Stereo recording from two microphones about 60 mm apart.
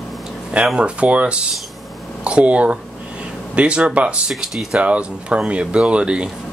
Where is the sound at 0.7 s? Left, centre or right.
Centre.